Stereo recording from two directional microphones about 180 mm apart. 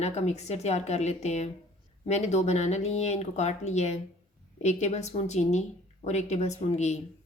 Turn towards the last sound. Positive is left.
turn(degrees=40)  # may be behind; listen again after turning